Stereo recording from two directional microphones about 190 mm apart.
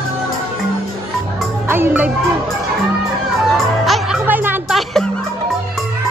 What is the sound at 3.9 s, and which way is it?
Music, centre (ahead or behind).